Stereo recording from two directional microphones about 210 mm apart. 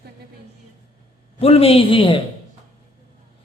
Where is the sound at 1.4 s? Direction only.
30° left (ahead or behind).